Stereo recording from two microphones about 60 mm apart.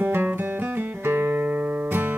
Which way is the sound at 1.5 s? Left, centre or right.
Right.